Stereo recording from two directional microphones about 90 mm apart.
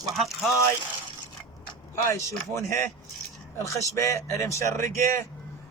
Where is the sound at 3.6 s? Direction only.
35° left (ahead or behind).